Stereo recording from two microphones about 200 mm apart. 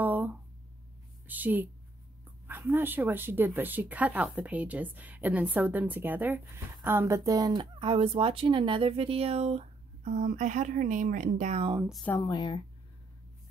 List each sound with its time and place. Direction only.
0.0 s a sound: 10° right (ahead or behind)
1.2 s a woman's voice: 10° right (ahead or behind); by 11.7 s 35° right (ahead or behind)
11.9 s speech: centre (ahead or behind)
12.2 s speech: 20° left (ahead or behind)